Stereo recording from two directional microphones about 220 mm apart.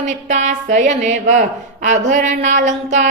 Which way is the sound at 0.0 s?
35° right (ahead or behind).